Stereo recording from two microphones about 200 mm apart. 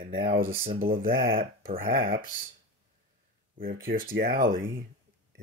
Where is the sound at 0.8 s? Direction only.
45° right (ahead or behind).